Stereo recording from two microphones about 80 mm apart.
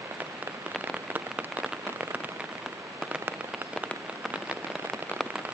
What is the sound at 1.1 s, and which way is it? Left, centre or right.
Rain on surface, centre.